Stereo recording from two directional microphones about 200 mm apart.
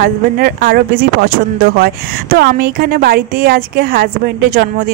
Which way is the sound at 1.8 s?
50° right (ahead or behind).